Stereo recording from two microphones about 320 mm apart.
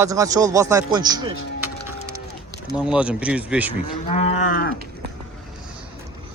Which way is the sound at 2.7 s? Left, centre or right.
Centre.